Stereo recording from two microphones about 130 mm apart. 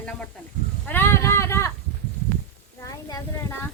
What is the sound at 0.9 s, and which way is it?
Child singing, 15° left (ahead or behind).